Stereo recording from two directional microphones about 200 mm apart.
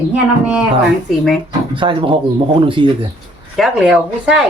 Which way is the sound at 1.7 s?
25° right (ahead or behind).